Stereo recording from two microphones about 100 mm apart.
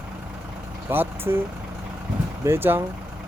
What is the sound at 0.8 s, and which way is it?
Vehicle, 20° right (ahead or behind).